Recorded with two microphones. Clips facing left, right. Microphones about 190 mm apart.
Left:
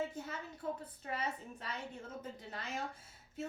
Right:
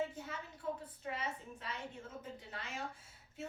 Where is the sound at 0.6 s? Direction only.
40° left (ahead or behind).